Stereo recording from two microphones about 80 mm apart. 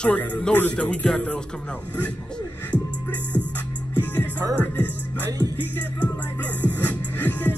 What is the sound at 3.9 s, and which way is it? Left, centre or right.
Music, left.